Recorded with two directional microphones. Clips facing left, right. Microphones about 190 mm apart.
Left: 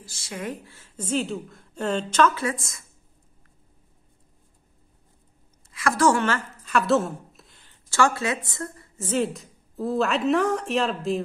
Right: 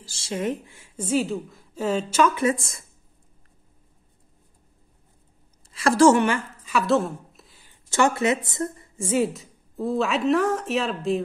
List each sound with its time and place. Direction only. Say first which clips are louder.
0.0 s a woman's voice: right 6 dB; 30° right (ahead or behind); by 2.4 s 10° right (ahead or behind)
2.4 s speech: right 6 dB; 30° right (ahead or behind)
5.7 s a woman's voice: right 5 dB; 30° right (ahead or behind)
6.2 s a woman's voice: right 2 dB; 15° right (ahead or behind)
6.7 s a sound: even; centre (ahead or behind); by 8.4 s 20° right (ahead or behind)
8.5 s a woman's voice: right 6 dB; 20° right (ahead or behind); by 11.2 s centre (ahead or behind)